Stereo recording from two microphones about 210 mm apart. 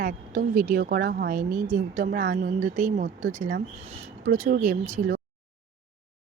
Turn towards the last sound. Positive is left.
turn(degrees=-35)  # may be behind; listen again after turning